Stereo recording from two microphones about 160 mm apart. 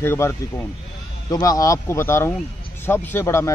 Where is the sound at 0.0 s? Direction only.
15° left (ahead or behind).